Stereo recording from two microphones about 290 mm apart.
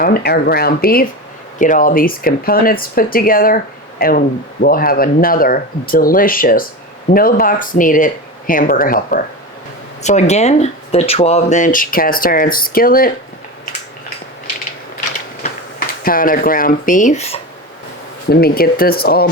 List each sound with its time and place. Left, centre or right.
0.0 s speech: left
16.0 s speech: left
18.3 s speech: left